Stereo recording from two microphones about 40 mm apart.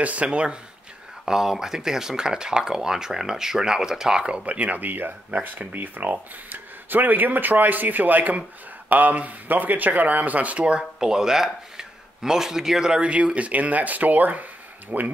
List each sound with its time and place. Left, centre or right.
0.0 s speech: right
1.2 s speech: centre
4.5 s speech: right
10.8 s speech: centre
13.0 s speech: right